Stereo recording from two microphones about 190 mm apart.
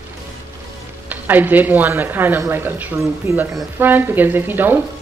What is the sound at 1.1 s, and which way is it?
Speech, 10° right (ahead or behind).